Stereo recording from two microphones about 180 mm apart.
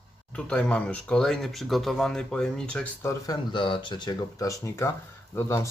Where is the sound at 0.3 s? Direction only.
5° left (ahead or behind).